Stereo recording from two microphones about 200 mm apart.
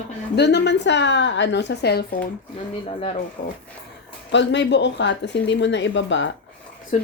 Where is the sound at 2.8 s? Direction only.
30° left (ahead or behind).